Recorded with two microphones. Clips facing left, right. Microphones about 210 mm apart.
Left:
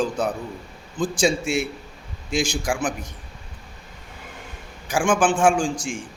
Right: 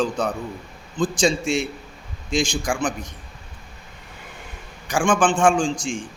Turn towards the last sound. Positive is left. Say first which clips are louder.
# right 2 dB
turn(degrees=5)  # may be behind; listen again after turning